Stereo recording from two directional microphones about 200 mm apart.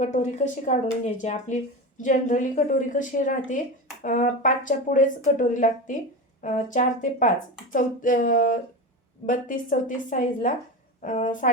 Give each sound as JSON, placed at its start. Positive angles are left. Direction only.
{"t": 0.0, "sound": "speech", "side_deg": 35}